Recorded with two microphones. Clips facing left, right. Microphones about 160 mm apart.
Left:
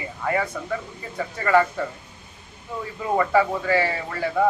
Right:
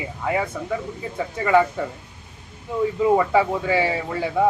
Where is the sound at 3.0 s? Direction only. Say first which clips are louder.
Right 2 dB; 15° right (ahead or behind).